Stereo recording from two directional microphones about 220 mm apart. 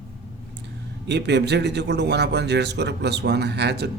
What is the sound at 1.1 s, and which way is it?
Speech, 50° right (ahead or behind).